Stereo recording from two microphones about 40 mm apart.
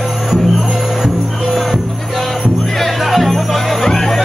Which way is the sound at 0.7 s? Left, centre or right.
Centre.